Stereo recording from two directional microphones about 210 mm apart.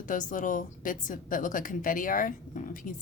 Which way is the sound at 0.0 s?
40° left (ahead or behind).